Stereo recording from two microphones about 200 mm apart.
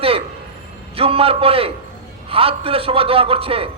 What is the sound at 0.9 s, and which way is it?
A man's voice, 30° right (ahead or behind).